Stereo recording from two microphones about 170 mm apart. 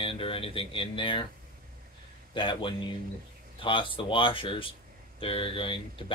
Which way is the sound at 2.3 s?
30° left (ahead or behind).